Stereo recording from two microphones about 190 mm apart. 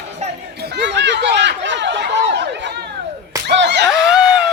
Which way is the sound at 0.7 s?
70° right (ahead or behind).